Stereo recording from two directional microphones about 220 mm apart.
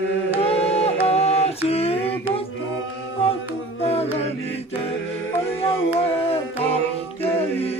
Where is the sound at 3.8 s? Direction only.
30° left (ahead or behind).